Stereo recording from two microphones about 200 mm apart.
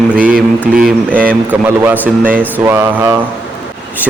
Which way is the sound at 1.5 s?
10° right (ahead or behind).